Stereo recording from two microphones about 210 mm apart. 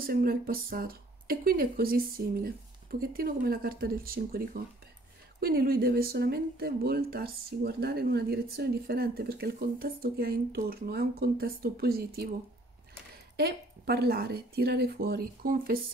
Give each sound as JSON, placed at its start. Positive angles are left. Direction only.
{"t": 0.0, "sound": "speech", "side_deg": -45}
{"t": 13.4, "sound": "speech", "side_deg": -50}